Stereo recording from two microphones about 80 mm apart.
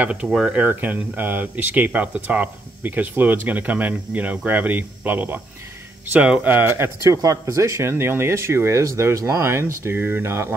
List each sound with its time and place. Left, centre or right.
0.0 s speech: centre
0.6 s speech: right
6.5 s speech: right